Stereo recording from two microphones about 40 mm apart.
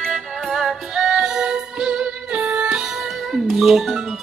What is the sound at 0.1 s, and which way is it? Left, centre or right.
Music, centre.